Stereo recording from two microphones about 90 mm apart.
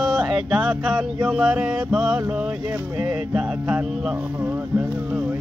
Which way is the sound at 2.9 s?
10° right (ahead or behind).